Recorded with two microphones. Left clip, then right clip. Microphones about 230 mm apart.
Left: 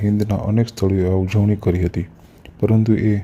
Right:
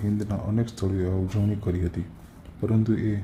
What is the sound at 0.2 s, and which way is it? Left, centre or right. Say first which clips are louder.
A man's voice: left 9 dB; left.